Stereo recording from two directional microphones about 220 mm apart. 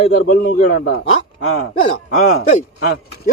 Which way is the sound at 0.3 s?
40° left (ahead or behind).